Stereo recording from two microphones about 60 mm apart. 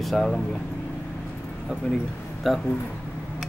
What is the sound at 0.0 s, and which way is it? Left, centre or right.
Speech, centre.